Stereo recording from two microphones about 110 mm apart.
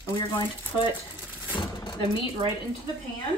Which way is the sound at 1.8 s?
45° left (ahead or behind).